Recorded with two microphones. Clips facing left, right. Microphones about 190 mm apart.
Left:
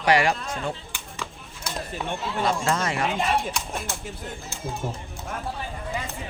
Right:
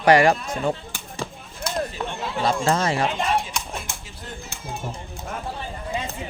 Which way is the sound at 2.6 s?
35° right (ahead or behind).